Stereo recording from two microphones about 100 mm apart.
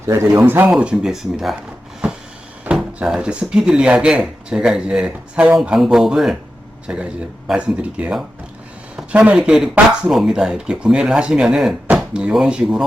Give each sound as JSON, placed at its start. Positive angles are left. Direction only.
{"t": 0.1, "sound": "speech", "side_deg": -25}
{"t": 0.7, "sound": "speech", "side_deg": -10}
{"t": 2.0, "sound": "a sound", "side_deg": -10}
{"t": 2.6, "sound": "speech", "side_deg": -5}
{"t": 9.0, "sound": "a sound", "side_deg": -15}
{"t": 9.4, "sound": "speech", "side_deg": -10}